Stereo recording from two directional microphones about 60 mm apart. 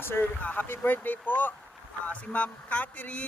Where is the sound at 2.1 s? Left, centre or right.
Left.